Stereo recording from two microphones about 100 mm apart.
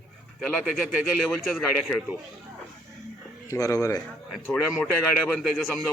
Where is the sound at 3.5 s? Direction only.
35° left (ahead or behind).